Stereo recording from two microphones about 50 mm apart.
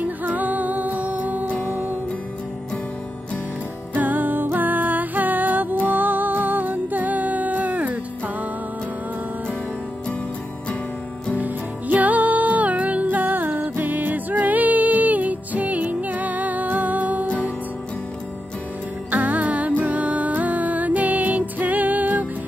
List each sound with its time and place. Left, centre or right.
0.0 s music: right
3.9 s music: right
11.3 s music: right
19.0 s music: right